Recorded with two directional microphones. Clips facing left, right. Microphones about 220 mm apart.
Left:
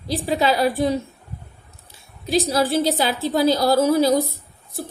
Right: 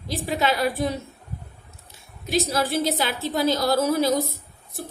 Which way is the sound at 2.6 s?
30° left (ahead or behind).